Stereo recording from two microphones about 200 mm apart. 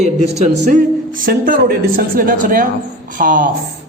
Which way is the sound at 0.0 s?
35° right (ahead or behind).